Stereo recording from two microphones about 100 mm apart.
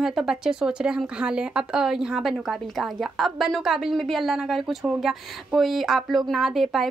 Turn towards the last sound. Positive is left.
turn(degrees=0)  # may be behind; listen again after turning